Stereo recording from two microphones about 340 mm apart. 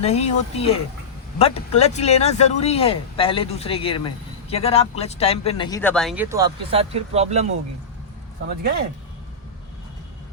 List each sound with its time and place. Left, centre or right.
0.0 s speech: centre